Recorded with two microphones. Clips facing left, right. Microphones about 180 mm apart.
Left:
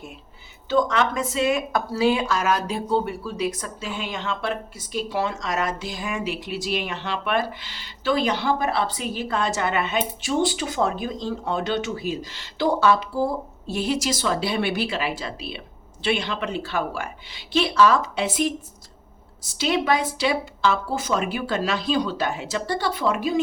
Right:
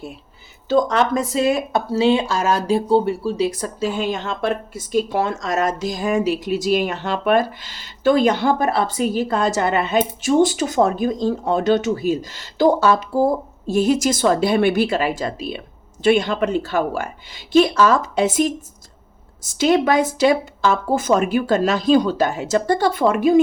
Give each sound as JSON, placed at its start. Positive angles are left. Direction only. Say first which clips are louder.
{"t": 0.7, "sound": "speech", "louder": "right 4 dB", "side_deg": -40}